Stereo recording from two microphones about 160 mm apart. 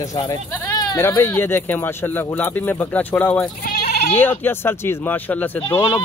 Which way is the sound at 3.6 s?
75° left (ahead or behind).